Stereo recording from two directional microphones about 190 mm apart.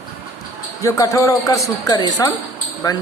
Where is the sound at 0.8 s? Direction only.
15° left (ahead or behind).